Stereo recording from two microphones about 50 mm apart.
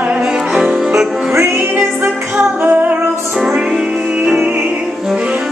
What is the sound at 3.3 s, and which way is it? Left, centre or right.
Music, centre.